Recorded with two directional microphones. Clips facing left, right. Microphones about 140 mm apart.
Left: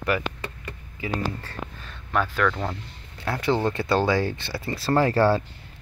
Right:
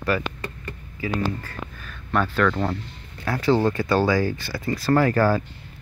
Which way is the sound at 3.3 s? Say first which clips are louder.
Right 3 dB; 20° left (ahead or behind).